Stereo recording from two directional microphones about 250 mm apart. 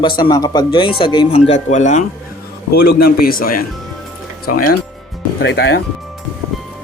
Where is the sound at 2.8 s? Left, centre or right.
Left.